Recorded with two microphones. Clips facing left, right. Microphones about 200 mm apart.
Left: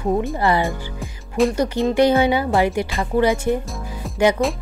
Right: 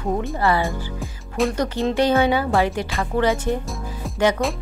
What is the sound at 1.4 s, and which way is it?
Speech, centre (ahead or behind).